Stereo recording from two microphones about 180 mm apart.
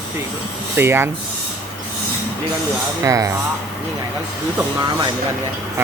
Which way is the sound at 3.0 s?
15° right (ahead or behind).